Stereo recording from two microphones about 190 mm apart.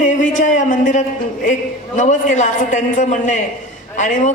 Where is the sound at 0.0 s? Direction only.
40° left (ahead or behind).